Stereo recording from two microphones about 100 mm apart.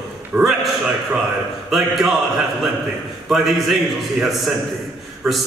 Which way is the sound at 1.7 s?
Centre (ahead or behind).